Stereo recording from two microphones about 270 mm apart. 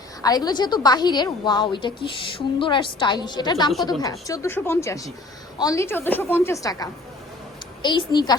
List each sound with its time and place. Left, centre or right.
0.2 s a woman's voice: centre